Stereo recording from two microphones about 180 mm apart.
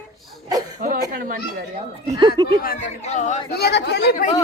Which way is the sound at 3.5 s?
65° left (ahead or behind).